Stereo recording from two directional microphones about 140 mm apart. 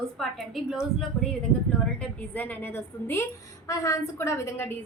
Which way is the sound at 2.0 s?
15° left (ahead or behind).